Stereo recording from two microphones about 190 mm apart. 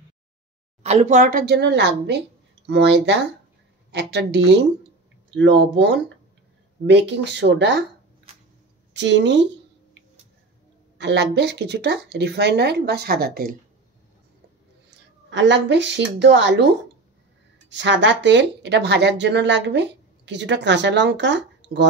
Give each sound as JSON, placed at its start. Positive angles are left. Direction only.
{"t": 0.8, "sound": "speech", "side_deg": -35}
{"t": 1.4, "sound": "speech", "side_deg": -60}
{"t": 8.3, "sound": "vehicle", "side_deg": -30}
{"t": 8.9, "sound": "speech", "side_deg": -65}
{"t": 11.0, "sound": "speech", "side_deg": -65}
{"t": 14.9, "sound": "speech", "side_deg": -70}